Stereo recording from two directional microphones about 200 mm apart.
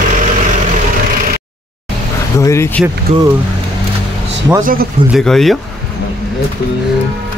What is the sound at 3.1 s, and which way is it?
Speech, 30° right (ahead or behind).